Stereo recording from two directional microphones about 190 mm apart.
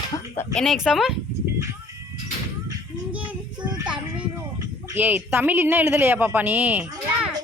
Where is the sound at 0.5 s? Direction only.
Centre (ahead or behind).